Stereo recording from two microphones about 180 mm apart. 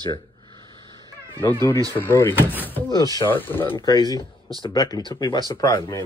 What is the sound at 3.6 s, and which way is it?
Speech, 25° left (ahead or behind).